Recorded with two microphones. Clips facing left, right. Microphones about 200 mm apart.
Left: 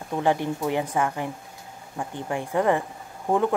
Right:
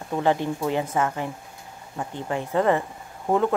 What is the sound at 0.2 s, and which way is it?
Speech, 15° left (ahead or behind).